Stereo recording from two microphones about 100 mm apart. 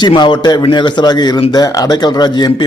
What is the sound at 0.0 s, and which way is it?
A man's voice, 50° left (ahead or behind).